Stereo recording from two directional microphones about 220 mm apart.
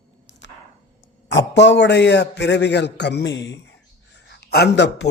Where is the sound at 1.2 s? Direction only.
55° left (ahead or behind).